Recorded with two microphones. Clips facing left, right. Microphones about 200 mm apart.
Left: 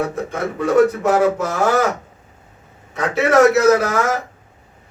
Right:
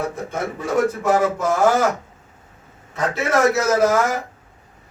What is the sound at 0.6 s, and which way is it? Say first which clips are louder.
Speech: left 6 dB; 65° left (ahead or behind).